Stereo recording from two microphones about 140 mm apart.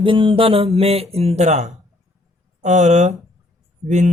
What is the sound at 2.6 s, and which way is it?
Speech, 60° right (ahead or behind).